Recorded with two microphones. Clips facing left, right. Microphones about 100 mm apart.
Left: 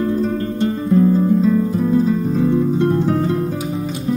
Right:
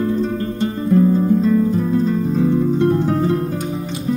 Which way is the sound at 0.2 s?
Centre (ahead or behind).